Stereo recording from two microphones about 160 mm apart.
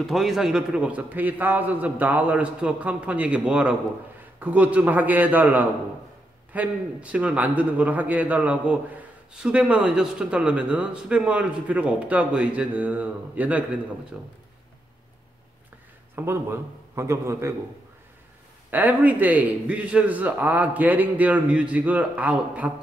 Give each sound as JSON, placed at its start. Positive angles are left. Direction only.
{"t": 0.0, "sound": "a man's voice", "side_deg": 0}
{"t": 16.2, "sound": "a man's voice", "side_deg": -15}
{"t": 18.7, "sound": "a man's voice", "side_deg": -10}